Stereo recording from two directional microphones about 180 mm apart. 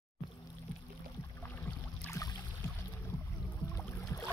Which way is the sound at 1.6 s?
15° left (ahead or behind).